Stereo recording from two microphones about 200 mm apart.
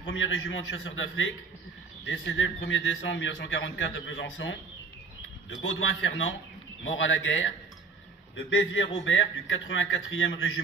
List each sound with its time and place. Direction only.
0.0 s a man's voice: 75° left (ahead or behind)